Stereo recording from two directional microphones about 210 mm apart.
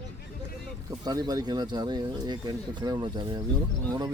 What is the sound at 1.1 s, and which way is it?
Speech, 20° right (ahead or behind).